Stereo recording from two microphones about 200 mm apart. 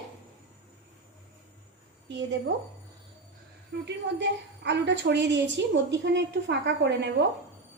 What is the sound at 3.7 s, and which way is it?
A woman's voice, 55° right (ahead or behind).